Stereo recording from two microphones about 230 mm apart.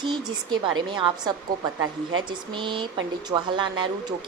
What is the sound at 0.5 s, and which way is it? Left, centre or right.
Speech, centre.